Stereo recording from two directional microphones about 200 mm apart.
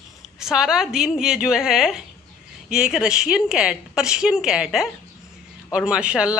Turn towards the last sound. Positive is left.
turn(degrees=-5)  # may be behind; listen again after turning